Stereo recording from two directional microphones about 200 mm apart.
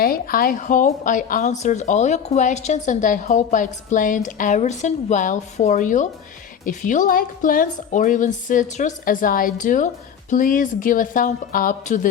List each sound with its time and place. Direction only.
0.0 s a woman's voice: 45° left (ahead or behind)